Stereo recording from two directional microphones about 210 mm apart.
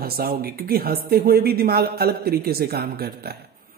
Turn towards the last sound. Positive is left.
turn(degrees=-45)  # may be behind; listen again after turning